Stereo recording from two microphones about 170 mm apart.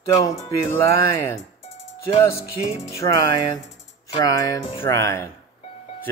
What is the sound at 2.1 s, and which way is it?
Speech, 20° left (ahead or behind).